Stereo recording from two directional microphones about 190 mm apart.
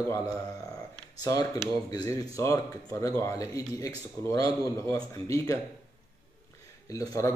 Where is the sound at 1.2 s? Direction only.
20° left (ahead or behind).